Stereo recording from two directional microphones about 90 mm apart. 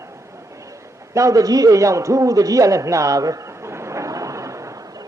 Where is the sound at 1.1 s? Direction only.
40° right (ahead or behind).